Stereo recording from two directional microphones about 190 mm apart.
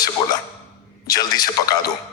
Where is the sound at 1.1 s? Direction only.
20° left (ahead or behind).